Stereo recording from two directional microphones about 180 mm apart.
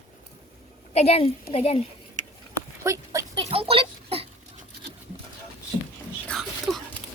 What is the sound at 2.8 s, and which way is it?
Clip-clop, 15° right (ahead or behind).